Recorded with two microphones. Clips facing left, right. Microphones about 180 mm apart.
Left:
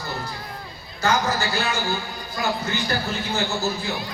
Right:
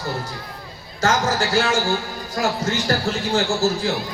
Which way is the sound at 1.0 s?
90° right.